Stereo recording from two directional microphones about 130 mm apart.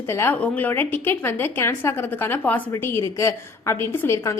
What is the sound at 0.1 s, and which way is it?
A woman's voice, 20° left (ahead or behind).